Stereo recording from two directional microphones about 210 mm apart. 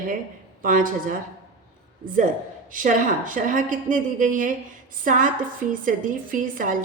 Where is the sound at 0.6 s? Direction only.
40° right (ahead or behind).